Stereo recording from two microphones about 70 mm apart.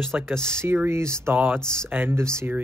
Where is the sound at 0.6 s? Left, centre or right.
Right.